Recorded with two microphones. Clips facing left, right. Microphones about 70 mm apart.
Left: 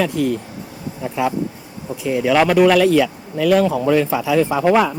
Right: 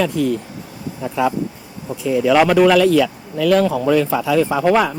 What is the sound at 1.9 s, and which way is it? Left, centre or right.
Speech, centre.